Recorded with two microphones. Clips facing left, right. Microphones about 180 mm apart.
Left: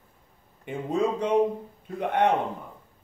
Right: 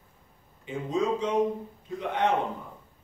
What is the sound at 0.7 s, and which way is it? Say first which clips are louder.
Speech: left 1 dB; 60° left (ahead or behind).